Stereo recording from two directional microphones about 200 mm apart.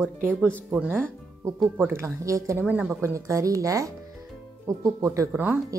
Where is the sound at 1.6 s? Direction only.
15° right (ahead or behind).